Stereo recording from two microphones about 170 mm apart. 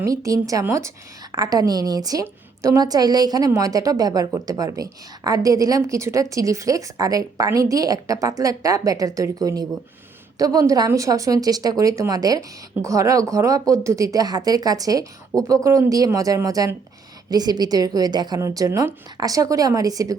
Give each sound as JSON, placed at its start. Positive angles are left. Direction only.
{"t": 0.0, "sound": "a woman's voice", "side_deg": -20}